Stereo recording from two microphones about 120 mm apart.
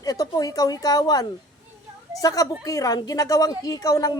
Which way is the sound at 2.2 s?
30° left (ahead or behind).